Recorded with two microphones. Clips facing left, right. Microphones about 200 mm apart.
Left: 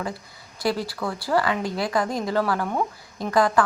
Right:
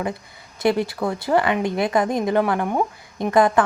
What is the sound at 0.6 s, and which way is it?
A woman's voice, 20° right (ahead or behind).